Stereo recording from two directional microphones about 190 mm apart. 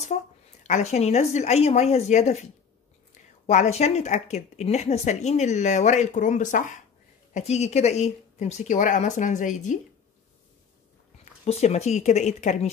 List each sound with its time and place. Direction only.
0.7 s speech: 35° left (ahead or behind)
3.4 s speech: 35° left (ahead or behind)
11.4 s speech: 35° left (ahead or behind)